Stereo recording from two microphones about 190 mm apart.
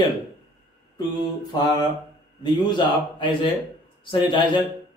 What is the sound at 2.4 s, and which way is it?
A man's voice, 25° left (ahead or behind).